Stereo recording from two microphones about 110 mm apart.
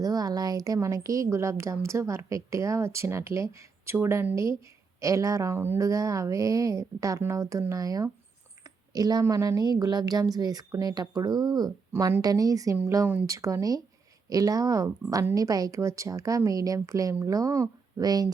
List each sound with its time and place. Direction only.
0.0 s a woman's voice: 35° right (ahead or behind)
8.6 s a sound: 35° right (ahead or behind)
9.2 s a woman's voice: 30° right (ahead or behind)